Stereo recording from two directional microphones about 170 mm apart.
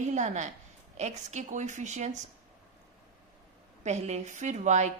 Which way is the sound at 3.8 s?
40° right (ahead or behind).